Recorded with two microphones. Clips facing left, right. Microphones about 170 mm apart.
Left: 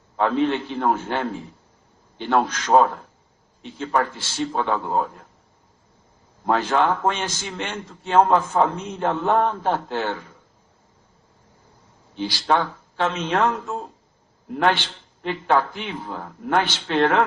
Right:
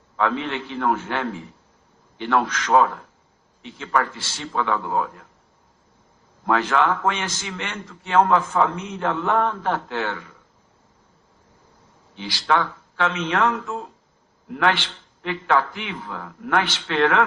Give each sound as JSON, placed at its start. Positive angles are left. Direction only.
{"t": 0.2, "sound": "a man's voice", "side_deg": 40}
{"t": 6.4, "sound": "a man's voice", "side_deg": 35}
{"t": 12.1, "sound": "a man's voice", "side_deg": 35}
{"t": 15.2, "sound": "a man's voice", "side_deg": 35}